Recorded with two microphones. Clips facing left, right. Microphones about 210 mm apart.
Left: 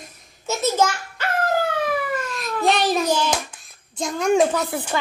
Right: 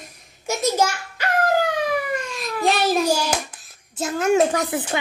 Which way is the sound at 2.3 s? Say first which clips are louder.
Left 1 dB; centre (ahead or behind).